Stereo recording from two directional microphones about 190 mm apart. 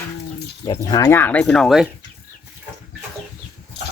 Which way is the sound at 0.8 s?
20° left (ahead or behind).